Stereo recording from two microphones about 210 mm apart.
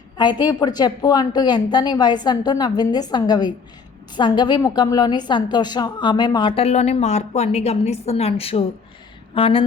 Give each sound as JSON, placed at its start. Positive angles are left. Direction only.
{"t": 0.2, "sound": "a woman's voice", "side_deg": 20}